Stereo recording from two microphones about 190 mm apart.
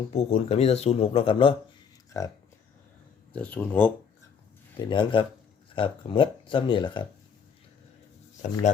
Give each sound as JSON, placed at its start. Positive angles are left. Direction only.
{"t": 0.1, "sound": "speech", "side_deg": 35}
{"t": 2.1, "sound": "speech", "side_deg": 15}
{"t": 3.3, "sound": "speech", "side_deg": 5}
{"t": 4.8, "sound": "speech", "side_deg": 25}